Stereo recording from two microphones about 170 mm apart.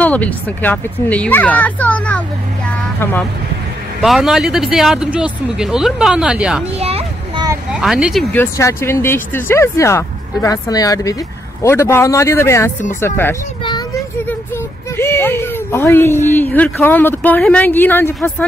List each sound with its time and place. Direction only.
0.0 s speech: 10° left (ahead or behind)
4.0 s speech: centre (ahead or behind)
6.8 s children playing: 35° right (ahead or behind)
7.7 s speech: 5° right (ahead or behind)
8.4 s speech: 15° left (ahead or behind)
15.0 s speech: 15° left (ahead or behind)